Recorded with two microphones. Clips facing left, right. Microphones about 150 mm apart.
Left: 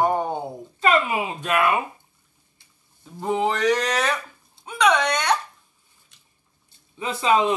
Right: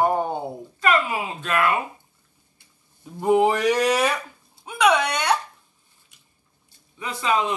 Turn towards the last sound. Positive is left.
turn(degrees=25)  # may be behind; listen again after turning